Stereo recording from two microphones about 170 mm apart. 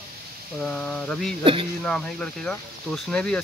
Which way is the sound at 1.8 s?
5° left (ahead or behind).